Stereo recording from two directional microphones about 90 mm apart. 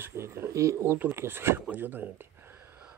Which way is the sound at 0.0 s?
30° right (ahead or behind).